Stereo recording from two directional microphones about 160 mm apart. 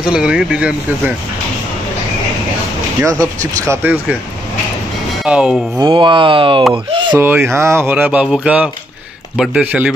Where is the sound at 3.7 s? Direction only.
10° right (ahead or behind).